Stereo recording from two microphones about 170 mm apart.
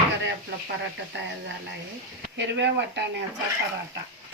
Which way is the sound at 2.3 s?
90° right.